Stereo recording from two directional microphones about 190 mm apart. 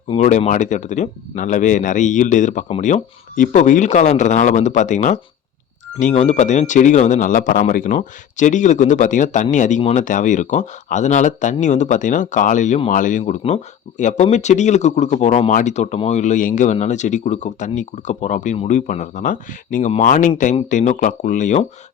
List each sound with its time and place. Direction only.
0.2 s speech: 40° left (ahead or behind)